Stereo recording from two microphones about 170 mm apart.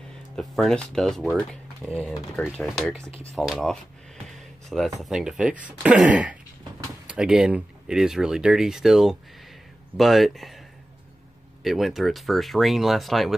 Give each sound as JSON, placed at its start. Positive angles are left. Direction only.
{"t": 0.4, "sound": "speech", "side_deg": 0}
{"t": 11.6, "sound": "speech", "side_deg": 0}